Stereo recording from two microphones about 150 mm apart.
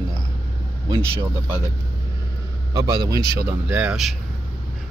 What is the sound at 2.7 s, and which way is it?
Speech, 25° right (ahead or behind).